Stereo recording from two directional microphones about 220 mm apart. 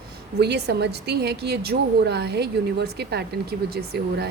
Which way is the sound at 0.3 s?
50° right (ahead or behind).